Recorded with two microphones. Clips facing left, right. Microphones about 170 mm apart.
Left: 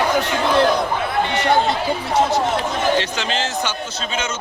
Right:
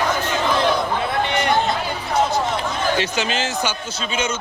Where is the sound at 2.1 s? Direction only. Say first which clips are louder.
Left 1 dB; 80° left.